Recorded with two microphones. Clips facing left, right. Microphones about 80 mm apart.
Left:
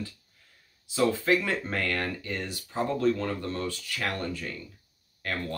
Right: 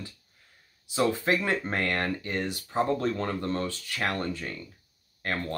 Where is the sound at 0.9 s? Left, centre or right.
Right.